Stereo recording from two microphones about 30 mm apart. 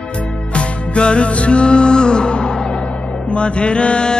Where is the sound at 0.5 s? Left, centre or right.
Left.